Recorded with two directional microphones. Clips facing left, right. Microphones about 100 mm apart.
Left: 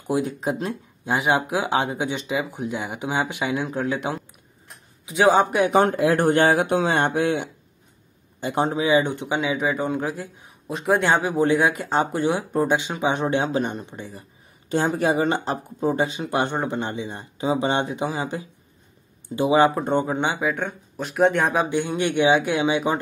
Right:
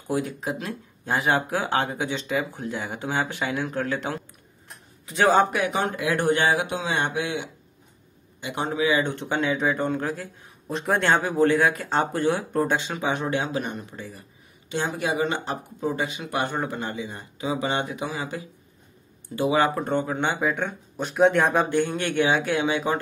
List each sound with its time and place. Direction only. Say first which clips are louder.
0.0 s speech: left 3 dB; 20° left (ahead or behind)
5.7 s speech: left 7 dB; 40° left (ahead or behind)
8.4 s speech: left 3 dB; 40° left (ahead or behind); by 9.1 s 20° left (ahead or behind)
9.1 s speech: left 1 dB; 10° left (ahead or behind)
10.7 s speech: left 2 dB; 5° left (ahead or behind); by 14.2 s 25° left (ahead or behind)
14.7 s speech: left 5 dB; 40° left (ahead or behind); by 20.3 s 15° left (ahead or behind)
20.3 s speech: left 1 dB; 5° left (ahead or behind)
21.7 s speech: left 1 dB; 15° left (ahead or behind)